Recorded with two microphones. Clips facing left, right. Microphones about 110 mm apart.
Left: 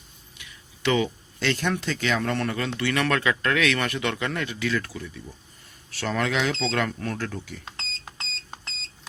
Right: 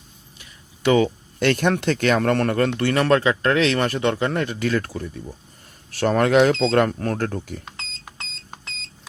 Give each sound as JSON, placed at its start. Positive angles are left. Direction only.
{"t": 0.3, "sound": "speech", "side_deg": -40}
{"t": 7.8, "sound": "alarm", "side_deg": -10}